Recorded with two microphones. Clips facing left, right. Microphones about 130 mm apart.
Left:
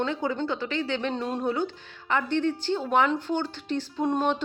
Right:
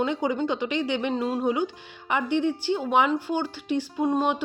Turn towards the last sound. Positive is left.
turn(degrees=-5)  # may be behind; listen again after turning